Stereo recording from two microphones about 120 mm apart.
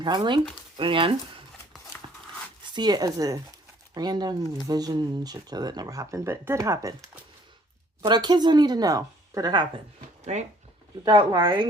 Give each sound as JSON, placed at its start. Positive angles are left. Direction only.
{"t": 0.0, "sound": "speech", "side_deg": -40}
{"t": 2.0, "sound": "a sound", "side_deg": -35}
{"t": 2.7, "sound": "speech", "side_deg": -35}
{"t": 8.0, "sound": "speech", "side_deg": -35}
{"t": 10.3, "sound": "speech", "side_deg": -75}
{"t": 11.0, "sound": "speech", "side_deg": -35}